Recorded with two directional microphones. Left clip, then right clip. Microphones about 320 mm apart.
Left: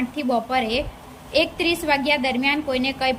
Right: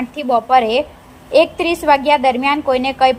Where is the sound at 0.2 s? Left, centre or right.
Centre.